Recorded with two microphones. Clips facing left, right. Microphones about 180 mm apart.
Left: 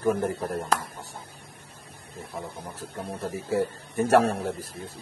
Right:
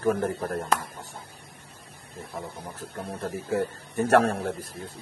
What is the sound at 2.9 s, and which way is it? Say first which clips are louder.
Speech: even; 5° left (ahead or behind).